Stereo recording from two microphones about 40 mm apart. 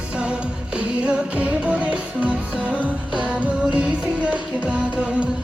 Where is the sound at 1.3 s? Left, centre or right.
Right.